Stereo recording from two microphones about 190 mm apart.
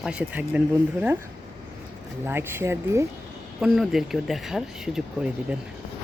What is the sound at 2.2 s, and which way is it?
Speech, 10° right (ahead or behind).